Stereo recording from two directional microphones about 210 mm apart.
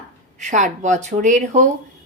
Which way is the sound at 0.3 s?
35° right (ahead or behind).